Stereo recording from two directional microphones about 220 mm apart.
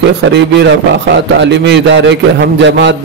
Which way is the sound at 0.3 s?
50° right (ahead or behind).